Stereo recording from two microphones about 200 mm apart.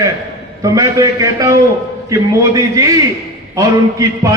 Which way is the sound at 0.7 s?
15° right (ahead or behind).